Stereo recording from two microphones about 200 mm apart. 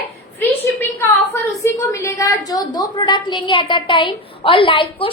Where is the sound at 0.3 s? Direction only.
10° left (ahead or behind).